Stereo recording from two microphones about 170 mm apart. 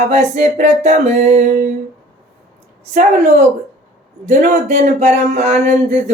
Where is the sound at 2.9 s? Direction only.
45° right (ahead or behind).